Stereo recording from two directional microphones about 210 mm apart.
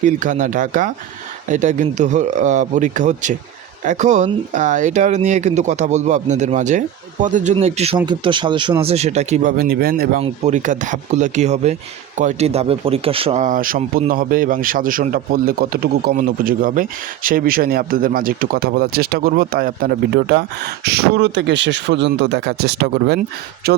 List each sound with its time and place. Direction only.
0.0 s speech: 35° right (ahead or behind)
10.2 s speech: 30° right (ahead or behind); by 23.8 s 50° right (ahead or behind)